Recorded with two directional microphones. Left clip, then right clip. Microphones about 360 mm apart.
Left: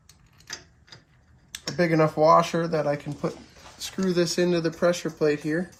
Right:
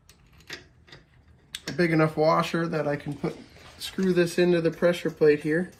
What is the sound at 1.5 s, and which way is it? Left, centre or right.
Speech, centre.